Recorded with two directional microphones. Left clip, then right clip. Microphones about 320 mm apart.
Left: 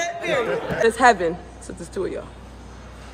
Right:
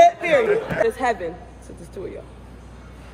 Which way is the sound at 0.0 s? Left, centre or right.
Centre.